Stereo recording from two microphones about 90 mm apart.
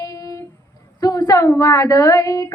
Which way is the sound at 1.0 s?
45° left (ahead or behind).